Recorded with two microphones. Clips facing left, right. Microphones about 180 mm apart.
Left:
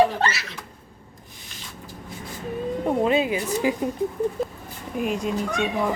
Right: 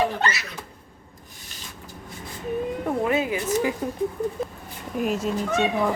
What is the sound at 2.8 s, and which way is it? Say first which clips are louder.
Speech: left 4 dB; 20° left (ahead or behind).